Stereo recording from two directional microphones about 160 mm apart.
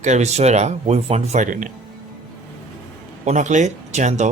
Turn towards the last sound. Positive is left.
turn(degrees=-50)  # may be behind; listen again after turning